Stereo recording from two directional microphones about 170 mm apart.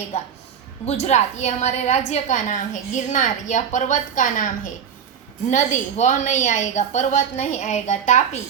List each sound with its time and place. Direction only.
1.0 s a woman's voice: 40° left (ahead or behind)